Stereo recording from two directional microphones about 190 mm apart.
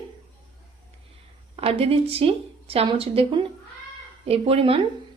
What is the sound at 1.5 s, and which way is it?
A woman's voice, 30° right (ahead or behind).